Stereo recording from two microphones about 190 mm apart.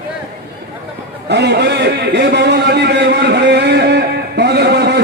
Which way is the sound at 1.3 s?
65° right (ahead or behind).